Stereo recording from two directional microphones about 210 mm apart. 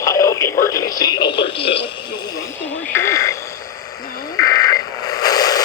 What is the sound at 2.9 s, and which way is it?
Radio, 15° left (ahead or behind).